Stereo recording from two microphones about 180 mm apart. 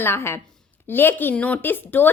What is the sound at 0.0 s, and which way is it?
A woman's voice, 15° left (ahead or behind).